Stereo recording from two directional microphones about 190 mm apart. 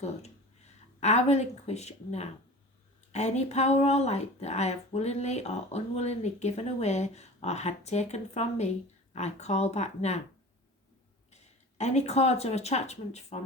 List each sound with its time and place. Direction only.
0.0 s speech: 35° left (ahead or behind)
11.3 s speech: 35° left (ahead or behind)